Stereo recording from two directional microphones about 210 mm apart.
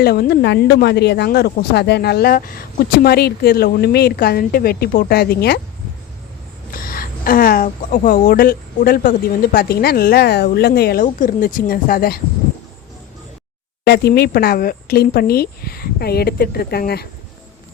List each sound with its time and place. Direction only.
0.0 s a woman's voice: 50° left (ahead or behind)
6.7 s a woman's voice: 45° left (ahead or behind)
13.8 s a woman's voice: 50° left (ahead or behind)